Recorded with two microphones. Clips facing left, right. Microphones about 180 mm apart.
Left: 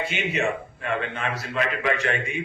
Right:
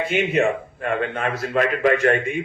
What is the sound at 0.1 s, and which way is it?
A man's voice, 50° right (ahead or behind).